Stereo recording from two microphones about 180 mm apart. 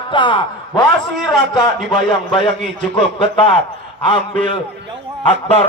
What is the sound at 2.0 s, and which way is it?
Speech, 30° left (ahead or behind).